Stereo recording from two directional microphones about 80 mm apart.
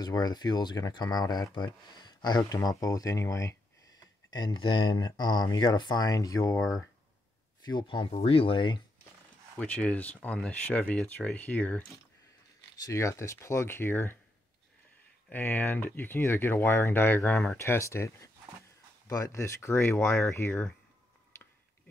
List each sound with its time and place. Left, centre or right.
0.0 s speech: left
2.5 s speech: left
4.3 s speech: left
7.6 s speech: left
9.6 s speech: centre
12.8 s speech: left
15.2 s speech: left
17.6 s speech: left